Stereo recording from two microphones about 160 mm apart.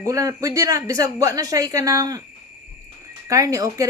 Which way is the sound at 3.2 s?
20° right (ahead or behind).